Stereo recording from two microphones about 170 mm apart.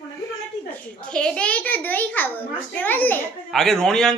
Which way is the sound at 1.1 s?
5° left (ahead or behind).